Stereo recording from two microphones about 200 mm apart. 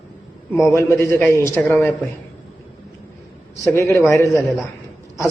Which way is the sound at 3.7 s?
15° left (ahead or behind).